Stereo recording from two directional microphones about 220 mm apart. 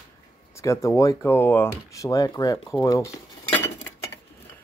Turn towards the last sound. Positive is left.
turn(degrees=10)  # may be behind; listen again after turning